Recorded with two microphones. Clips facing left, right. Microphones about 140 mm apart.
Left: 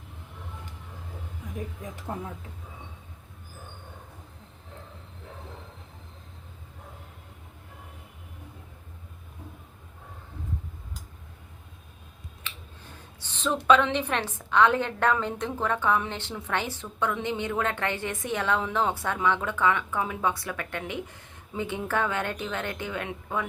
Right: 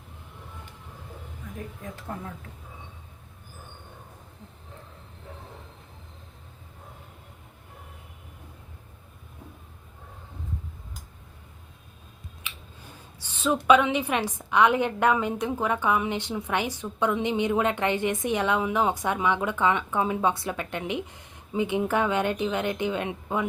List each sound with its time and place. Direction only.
1.5 s speech: 20° left (ahead or behind)
12.4 s scissors: 15° right (ahead or behind)
13.1 s a woman's voice: 10° right (ahead or behind)